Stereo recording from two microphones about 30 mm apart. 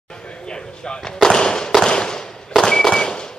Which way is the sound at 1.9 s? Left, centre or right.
Left.